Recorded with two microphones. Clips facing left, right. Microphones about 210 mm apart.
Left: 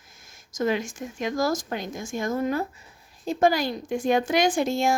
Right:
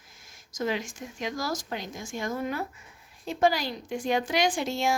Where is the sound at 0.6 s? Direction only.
50° left (ahead or behind).